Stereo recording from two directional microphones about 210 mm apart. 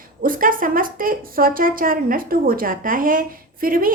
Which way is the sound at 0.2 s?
40° right (ahead or behind).